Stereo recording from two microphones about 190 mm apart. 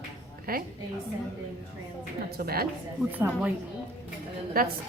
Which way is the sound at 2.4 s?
55° right (ahead or behind).